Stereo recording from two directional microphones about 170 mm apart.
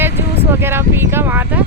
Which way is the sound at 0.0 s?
15° right (ahead or behind).